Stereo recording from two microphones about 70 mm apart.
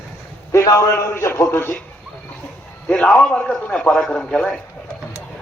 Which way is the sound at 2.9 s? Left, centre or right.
Centre.